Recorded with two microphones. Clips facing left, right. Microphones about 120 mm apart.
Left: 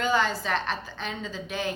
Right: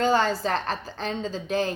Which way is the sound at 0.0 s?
35° right (ahead or behind).